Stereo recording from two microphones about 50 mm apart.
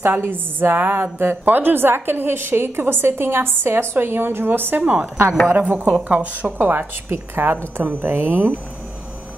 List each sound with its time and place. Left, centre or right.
0.0 s a woman's voice: right
6.6 s a woman's voice: right